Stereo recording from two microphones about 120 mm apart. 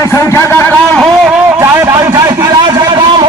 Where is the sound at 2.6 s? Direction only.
40° right (ahead or behind).